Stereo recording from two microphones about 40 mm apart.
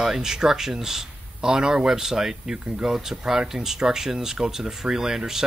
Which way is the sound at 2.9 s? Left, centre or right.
Centre.